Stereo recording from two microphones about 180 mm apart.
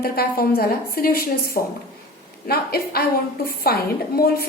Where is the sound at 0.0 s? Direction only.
55° left (ahead or behind).